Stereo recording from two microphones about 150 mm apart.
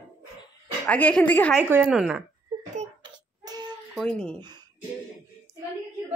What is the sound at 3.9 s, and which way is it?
Speech, 5° left (ahead or behind).